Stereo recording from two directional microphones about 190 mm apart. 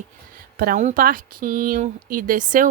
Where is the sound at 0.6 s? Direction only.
45° right (ahead or behind).